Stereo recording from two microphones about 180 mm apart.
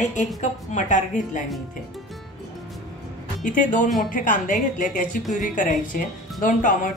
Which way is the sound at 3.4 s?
45° left (ahead or behind).